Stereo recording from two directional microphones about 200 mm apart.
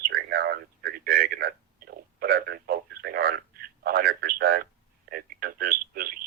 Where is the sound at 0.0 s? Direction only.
50° right (ahead or behind).